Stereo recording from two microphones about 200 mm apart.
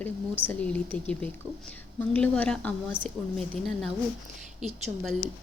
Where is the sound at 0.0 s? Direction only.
5° left (ahead or behind).